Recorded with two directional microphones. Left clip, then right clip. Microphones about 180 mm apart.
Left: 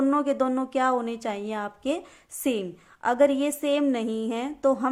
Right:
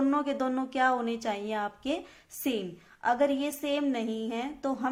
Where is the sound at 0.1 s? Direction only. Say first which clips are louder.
Left 5 dB; 30° left (ahead or behind).